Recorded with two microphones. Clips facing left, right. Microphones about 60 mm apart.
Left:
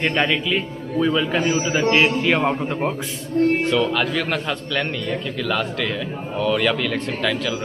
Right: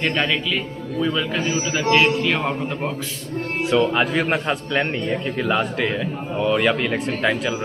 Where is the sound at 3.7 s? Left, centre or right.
Right.